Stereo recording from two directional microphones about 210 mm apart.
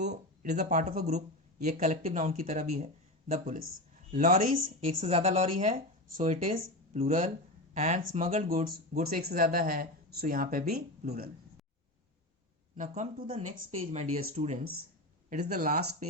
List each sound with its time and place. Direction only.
0.6 s speech: 35° right (ahead or behind)
12.7 s speech: 35° right (ahead or behind)
15.3 s speech: 45° right (ahead or behind)